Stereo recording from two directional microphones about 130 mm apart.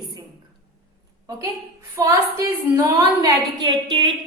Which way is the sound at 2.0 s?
25° right (ahead or behind).